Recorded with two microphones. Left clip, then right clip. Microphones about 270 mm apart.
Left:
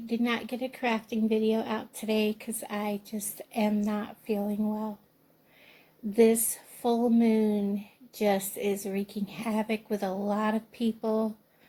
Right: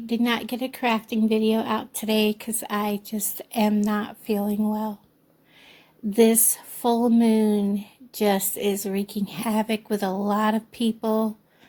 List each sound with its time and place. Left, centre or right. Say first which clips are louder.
0.1 s speech: right 5 dB; right
6.1 s speech: right 4 dB; right